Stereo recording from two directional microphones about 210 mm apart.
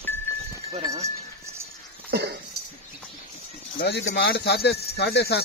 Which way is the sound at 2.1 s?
55° right (ahead or behind).